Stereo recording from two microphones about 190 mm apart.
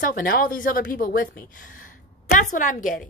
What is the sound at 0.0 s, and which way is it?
A woman's voice, 50° left (ahead or behind).